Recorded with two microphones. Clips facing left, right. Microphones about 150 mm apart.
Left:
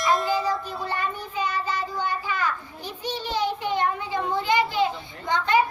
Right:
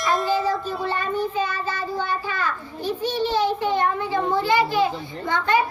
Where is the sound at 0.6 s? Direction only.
15° left (ahead or behind).